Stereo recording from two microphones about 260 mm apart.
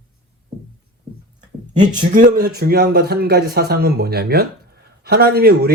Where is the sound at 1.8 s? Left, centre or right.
Right.